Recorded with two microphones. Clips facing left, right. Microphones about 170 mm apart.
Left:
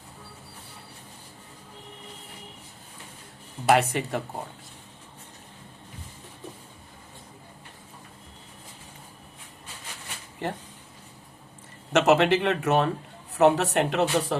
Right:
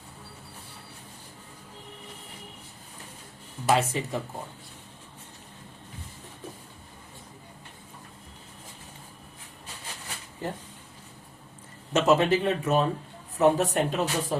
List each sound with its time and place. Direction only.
3.7 s speech: 65° left (ahead or behind)
10.4 s speech: 70° left (ahead or behind)
11.9 s speech: 75° left (ahead or behind)